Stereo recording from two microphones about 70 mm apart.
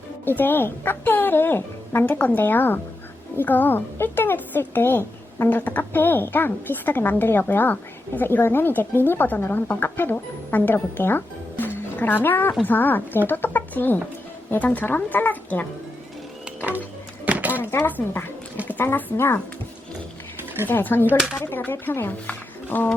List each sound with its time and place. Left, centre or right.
0.3 s a woman's voice: left
16.6 s music: right
17.2 s a sound: right
17.6 s a woman's voice: left
20.7 s a woman's voice: left